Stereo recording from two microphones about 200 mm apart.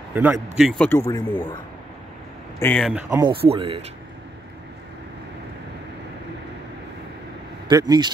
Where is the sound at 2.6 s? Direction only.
5° left (ahead or behind).